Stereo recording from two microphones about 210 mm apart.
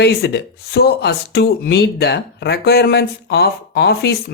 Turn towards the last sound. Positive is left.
turn(degrees=50)  # may be behind; listen again after turning